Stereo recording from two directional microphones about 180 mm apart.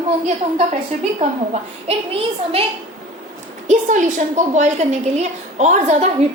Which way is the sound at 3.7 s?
45° right (ahead or behind).